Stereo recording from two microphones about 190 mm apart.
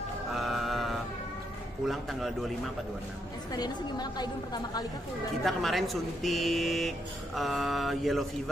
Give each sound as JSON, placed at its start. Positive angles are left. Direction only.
{"t": 0.3, "sound": "mantra", "side_deg": 0}
{"t": 1.9, "sound": "speech", "side_deg": 0}
{"t": 3.5, "sound": "a woman's voice", "side_deg": 20}
{"t": 5.4, "sound": "speech", "side_deg": 0}